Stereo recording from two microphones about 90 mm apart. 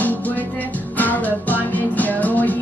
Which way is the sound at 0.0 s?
20° left (ahead or behind).